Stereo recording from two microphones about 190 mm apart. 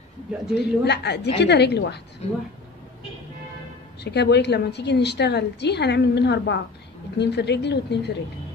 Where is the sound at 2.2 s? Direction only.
35° left (ahead or behind).